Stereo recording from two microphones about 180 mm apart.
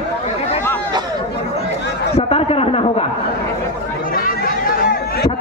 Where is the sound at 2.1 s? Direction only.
35° left (ahead or behind).